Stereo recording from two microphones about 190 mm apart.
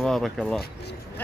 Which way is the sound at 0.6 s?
60° left (ahead or behind).